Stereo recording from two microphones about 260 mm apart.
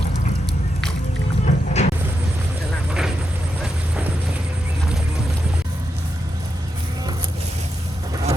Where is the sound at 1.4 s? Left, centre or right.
Left.